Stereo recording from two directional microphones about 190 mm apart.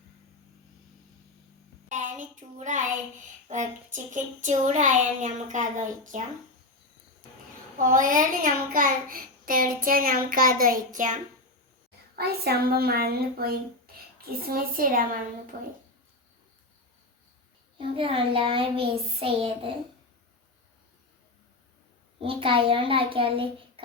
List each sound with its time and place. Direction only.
1.9 s child singing: 40° right (ahead or behind)
3.5 s a child's voice: 40° right (ahead or behind)
7.8 s a child's voice: 45° right (ahead or behind)
12.1 s a child's voice: 55° right (ahead or behind)
17.7 s child singing: 30° right (ahead or behind)
22.2 s child singing: 30° right (ahead or behind)